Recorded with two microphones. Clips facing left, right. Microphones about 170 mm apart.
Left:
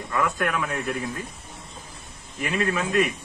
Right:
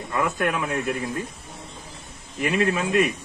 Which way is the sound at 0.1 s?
25° right (ahead or behind).